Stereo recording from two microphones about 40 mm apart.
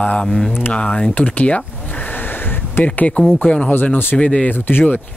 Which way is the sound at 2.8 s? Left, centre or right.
Left.